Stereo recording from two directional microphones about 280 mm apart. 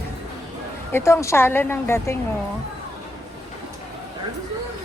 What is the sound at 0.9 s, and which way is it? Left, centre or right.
A woman's voice, centre.